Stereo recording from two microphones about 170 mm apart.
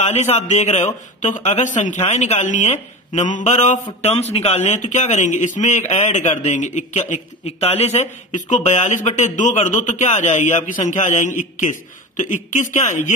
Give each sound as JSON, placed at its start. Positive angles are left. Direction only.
{"t": 0.0, "sound": "speech", "side_deg": 40}